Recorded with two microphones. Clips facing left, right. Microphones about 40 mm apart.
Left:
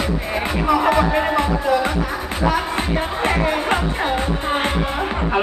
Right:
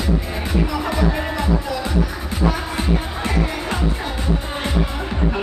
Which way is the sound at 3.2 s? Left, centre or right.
Left.